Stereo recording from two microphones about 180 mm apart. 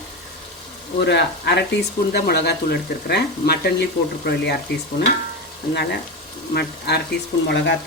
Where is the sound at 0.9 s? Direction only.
70° left (ahead or behind).